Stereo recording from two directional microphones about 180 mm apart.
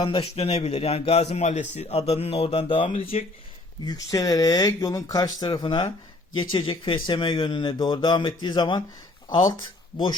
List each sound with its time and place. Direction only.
0.0 s a man's voice: 30° left (ahead or behind)
3.8 s speech: 20° left (ahead or behind)